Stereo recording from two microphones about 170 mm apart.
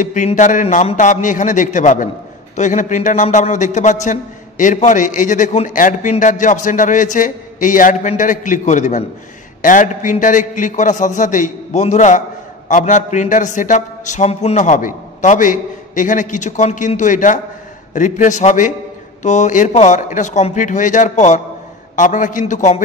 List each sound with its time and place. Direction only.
0.0 s a man's voice: 45° left (ahead or behind)